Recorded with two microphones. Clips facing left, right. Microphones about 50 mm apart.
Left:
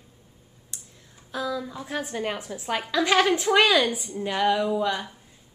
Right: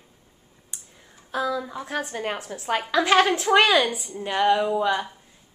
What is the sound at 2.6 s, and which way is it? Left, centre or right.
A woman's voice, centre.